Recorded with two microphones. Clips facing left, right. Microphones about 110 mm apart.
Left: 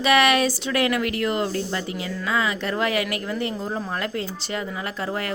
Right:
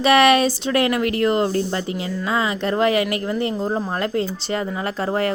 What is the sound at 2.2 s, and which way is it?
A woman's voice, 30° right (ahead or behind).